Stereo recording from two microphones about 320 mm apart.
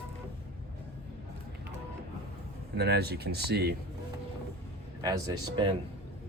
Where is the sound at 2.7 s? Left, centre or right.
Right.